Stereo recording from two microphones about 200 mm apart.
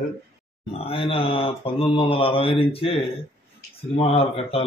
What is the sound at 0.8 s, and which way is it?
Speech, 30° left (ahead or behind).